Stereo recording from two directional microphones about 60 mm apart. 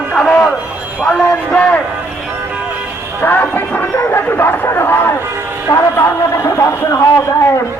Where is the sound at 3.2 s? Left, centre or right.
Left.